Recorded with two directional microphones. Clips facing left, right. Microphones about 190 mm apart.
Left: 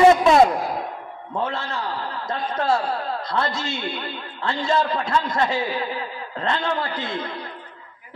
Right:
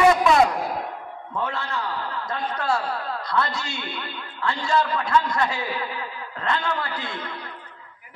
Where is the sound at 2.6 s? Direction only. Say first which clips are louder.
Left 4 dB; 20° left (ahead or behind).